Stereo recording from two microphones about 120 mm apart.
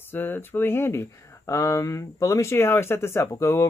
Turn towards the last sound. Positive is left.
turn(degrees=20)  # may be behind; listen again after turning